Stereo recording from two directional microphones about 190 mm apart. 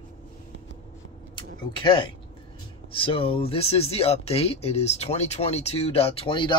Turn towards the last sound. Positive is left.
turn(degrees=25)  # may be behind; listen again after turning